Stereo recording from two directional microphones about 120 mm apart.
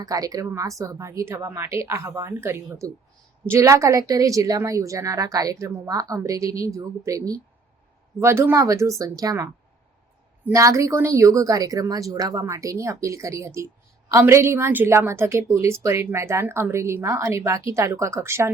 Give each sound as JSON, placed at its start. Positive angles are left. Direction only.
{"t": 0.0, "sound": "a woman's voice", "side_deg": -30}
{"t": 10.5, "sound": "a woman's voice", "side_deg": -25}